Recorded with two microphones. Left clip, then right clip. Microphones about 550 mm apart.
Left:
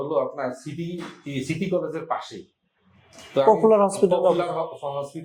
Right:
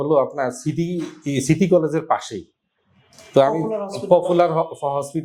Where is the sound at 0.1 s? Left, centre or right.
Right.